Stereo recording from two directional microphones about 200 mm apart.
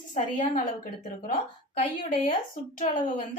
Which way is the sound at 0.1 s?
40° left (ahead or behind).